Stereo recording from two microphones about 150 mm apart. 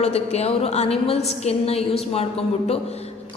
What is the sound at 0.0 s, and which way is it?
Speech, 45° left (ahead or behind).